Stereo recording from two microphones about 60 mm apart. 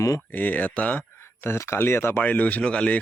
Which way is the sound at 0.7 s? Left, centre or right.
Left.